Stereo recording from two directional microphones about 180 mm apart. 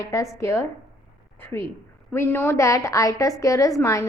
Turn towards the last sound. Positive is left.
turn(degrees=15)  # may be behind; listen again after turning